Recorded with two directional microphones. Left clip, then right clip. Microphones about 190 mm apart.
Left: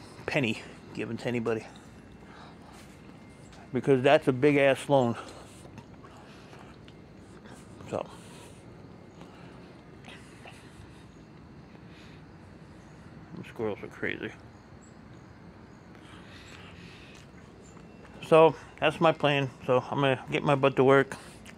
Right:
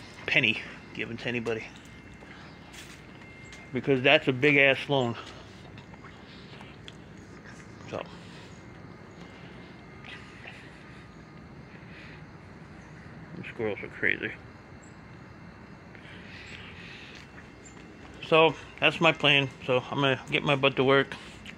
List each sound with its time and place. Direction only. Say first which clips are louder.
0.2 s speech: right 5 dB; 45° left (ahead or behind)
3.7 s speech: even; 35° left (ahead or behind)
7.9 s speech: left 3 dB; 40° left (ahead or behind)
13.4 s speech: right 1 dB; 15° left (ahead or behind)
18.2 s a sound: left 2 dB; 35° left (ahead or behind)
18.8 s a man's voice: right 2 dB; 15° left (ahead or behind); by 21.5 s 30° left (ahead or behind)